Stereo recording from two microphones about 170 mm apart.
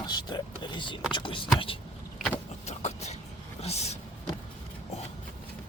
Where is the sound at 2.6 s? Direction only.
40° left (ahead or behind).